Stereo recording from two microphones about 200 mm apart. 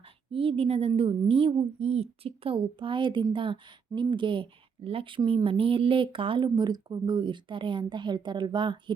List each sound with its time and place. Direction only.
0.3 s a woman's voice: 30° right (ahead or behind)